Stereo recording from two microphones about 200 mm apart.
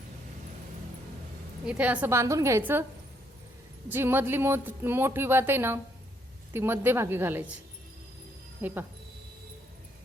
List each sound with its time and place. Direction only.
1.6 s speech: 5° right (ahead or behind)
3.8 s speech: 10° right (ahead or behind)
8.6 s speech: 10° right (ahead or behind)